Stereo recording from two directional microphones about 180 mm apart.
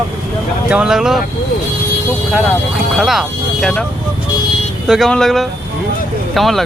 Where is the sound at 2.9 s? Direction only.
Centre (ahead or behind).